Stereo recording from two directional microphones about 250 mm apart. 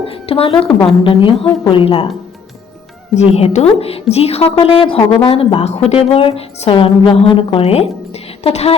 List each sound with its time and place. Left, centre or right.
0.1 s a woman's voice: left
3.2 s a woman's voice: left